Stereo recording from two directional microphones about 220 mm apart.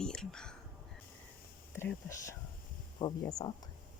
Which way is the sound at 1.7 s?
10° left (ahead or behind).